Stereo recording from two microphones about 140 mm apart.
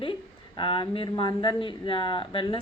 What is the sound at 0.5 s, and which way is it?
Speech, 35° left (ahead or behind).